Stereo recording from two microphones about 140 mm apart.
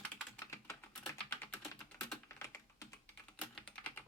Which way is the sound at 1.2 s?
15° left (ahead or behind).